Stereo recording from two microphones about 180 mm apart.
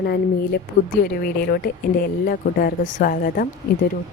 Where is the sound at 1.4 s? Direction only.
55° left (ahead or behind).